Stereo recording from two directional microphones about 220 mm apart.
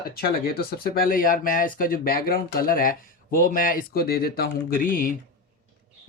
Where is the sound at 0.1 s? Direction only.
45° left (ahead or behind).